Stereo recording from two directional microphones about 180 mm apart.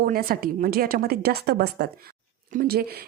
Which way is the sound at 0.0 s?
55° right (ahead or behind).